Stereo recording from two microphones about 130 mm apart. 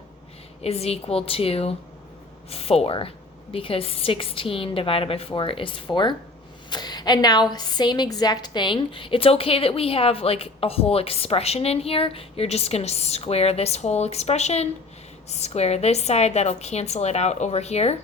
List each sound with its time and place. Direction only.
0.6 s a woman's voice: 50° left (ahead or behind)